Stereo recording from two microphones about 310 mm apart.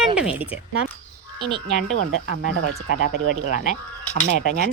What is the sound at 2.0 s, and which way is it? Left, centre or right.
Speech, right.